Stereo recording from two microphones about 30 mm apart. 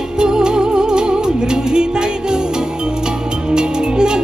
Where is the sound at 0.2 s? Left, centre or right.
Right.